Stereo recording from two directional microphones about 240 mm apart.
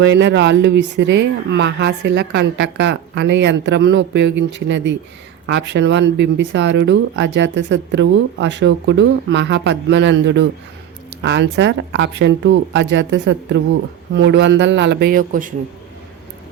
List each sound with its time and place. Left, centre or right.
0.0 s speech: right